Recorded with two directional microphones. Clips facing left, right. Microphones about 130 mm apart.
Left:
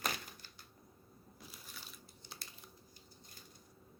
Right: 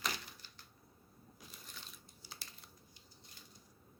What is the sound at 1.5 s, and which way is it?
Crumpling, centre (ahead or behind).